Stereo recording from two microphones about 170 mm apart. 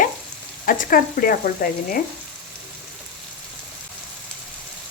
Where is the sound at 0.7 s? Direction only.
55° left (ahead or behind).